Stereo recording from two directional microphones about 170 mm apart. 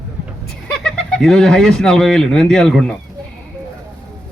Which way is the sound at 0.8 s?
5° left (ahead or behind).